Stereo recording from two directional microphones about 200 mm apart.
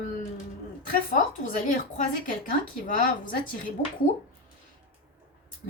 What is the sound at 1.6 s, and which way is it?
A woman's voice, 40° left (ahead or behind).